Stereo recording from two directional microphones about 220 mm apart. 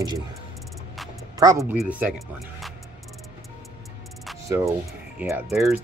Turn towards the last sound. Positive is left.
turn(degrees=-5)  # may be behind; listen again after turning